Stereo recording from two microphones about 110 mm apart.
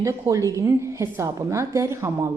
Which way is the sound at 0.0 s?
30° right (ahead or behind).